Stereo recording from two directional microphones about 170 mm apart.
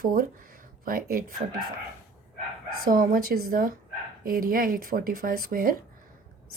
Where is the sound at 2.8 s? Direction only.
55° right (ahead or behind).